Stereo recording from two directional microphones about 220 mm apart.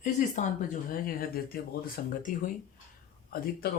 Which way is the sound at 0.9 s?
40° left (ahead or behind).